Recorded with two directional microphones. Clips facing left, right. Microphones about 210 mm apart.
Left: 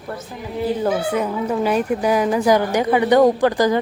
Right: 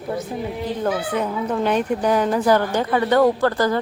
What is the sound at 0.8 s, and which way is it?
Speech, 10° left (ahead or behind).